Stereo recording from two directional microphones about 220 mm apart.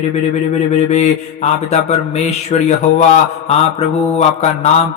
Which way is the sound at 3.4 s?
25° left (ahead or behind).